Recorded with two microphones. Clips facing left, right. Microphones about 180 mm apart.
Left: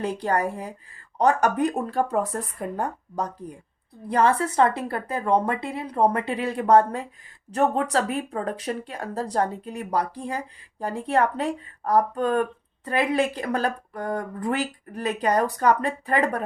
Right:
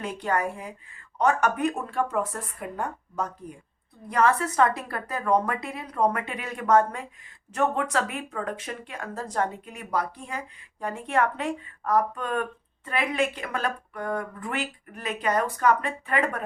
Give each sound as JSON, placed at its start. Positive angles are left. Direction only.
{"t": 0.0, "sound": "a woman's voice", "side_deg": 35}